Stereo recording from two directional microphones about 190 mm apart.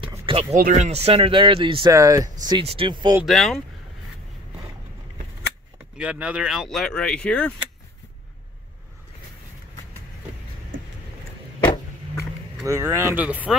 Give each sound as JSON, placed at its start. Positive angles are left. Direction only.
{"t": 0.3, "sound": "speech", "side_deg": -30}
{"t": 0.6, "sound": "speech", "side_deg": -40}
{"t": 2.6, "sound": "speech", "side_deg": -30}
{"t": 3.3, "sound": "speech", "side_deg": 0}
{"t": 5.9, "sound": "speech", "side_deg": -5}
{"t": 11.6, "sound": "a sound", "side_deg": 25}
{"t": 12.6, "sound": "speech", "side_deg": -15}